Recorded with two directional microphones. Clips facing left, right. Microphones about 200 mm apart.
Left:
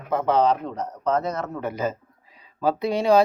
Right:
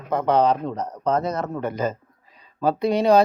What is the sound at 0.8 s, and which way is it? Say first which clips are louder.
Speech: even; 35° right (ahead or behind).